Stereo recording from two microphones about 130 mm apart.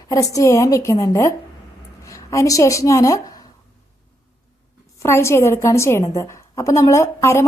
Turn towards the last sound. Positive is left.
turn(degrees=20)  # may be behind; listen again after turning